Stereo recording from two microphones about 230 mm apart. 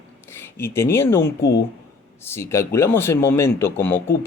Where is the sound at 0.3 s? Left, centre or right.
Centre.